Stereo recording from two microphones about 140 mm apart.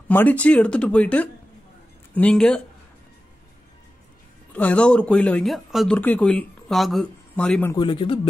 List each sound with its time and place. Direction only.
0.1 s speech: 10° left (ahead or behind)
4.5 s speech: 10° left (ahead or behind)
7.7 s a man's voice: 35° left (ahead or behind)